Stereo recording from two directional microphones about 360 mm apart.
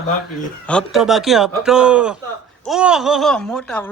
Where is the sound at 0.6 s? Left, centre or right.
Centre.